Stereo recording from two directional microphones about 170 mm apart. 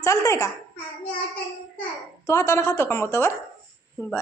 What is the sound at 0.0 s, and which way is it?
Speech, 15° left (ahead or behind).